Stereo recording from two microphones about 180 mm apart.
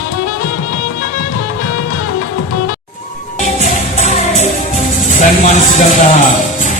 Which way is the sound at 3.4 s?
40° left (ahead or behind).